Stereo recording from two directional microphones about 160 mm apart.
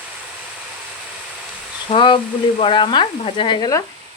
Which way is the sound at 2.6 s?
30° left (ahead or behind).